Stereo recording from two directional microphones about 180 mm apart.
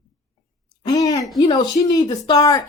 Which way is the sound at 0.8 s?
20° left (ahead or behind).